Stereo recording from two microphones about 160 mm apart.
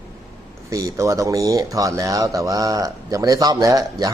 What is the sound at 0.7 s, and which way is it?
Speech, 20° right (ahead or behind).